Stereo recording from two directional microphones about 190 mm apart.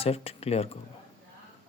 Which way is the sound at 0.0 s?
30° left (ahead or behind).